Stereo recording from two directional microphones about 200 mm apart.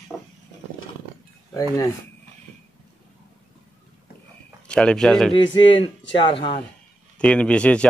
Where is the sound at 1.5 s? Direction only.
20° left (ahead or behind).